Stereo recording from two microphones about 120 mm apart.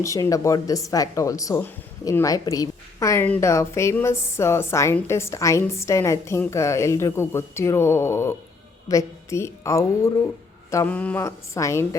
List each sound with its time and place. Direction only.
0.0 s a woman's voice: 25° left (ahead or behind)
10.8 s mantra: 10° left (ahead or behind)
11.2 s speech: 25° left (ahead or behind)